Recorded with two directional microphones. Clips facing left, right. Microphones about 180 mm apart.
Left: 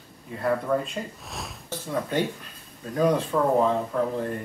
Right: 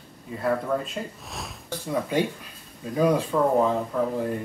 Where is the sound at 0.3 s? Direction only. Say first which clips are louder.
Left 1 dB; centre (ahead or behind).